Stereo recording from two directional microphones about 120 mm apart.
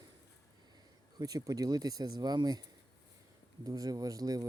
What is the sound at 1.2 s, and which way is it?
Speech, 30° right (ahead or behind).